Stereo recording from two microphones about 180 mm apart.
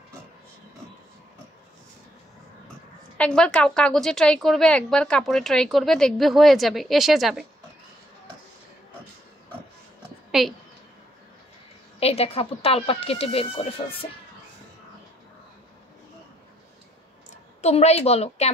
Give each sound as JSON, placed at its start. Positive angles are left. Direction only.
{"t": 3.2, "sound": "a woman's voice", "side_deg": 5}
{"t": 10.3, "sound": "a woman's voice", "side_deg": 0}
{"t": 12.0, "sound": "speech", "side_deg": 35}
{"t": 17.6, "sound": "speech", "side_deg": 35}